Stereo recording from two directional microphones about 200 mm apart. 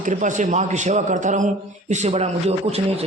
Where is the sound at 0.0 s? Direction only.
40° right (ahead or behind).